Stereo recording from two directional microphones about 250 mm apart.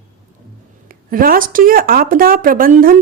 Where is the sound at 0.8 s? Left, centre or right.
Right.